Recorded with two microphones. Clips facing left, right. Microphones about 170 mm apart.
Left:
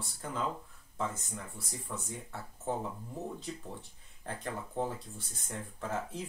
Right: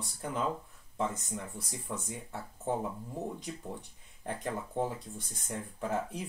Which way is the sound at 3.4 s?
15° right (ahead or behind).